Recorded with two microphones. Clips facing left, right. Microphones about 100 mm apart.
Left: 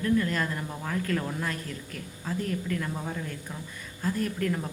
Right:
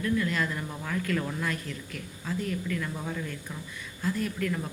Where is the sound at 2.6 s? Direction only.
30° left (ahead or behind).